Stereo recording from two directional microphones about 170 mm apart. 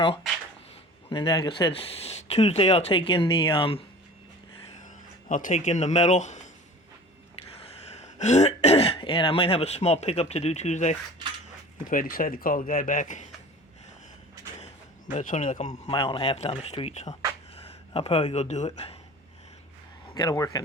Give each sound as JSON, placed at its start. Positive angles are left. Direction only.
{"t": 1.1, "sound": "speech", "side_deg": 25}
{"t": 5.3, "sound": "speech", "side_deg": 50}
{"t": 7.6, "sound": "speech", "side_deg": 40}
{"t": 11.9, "sound": "speech", "side_deg": 55}
{"t": 15.1, "sound": "speech", "side_deg": 50}
{"t": 15.9, "sound": "speech", "side_deg": 30}
{"t": 20.1, "sound": "a man's voice", "side_deg": 20}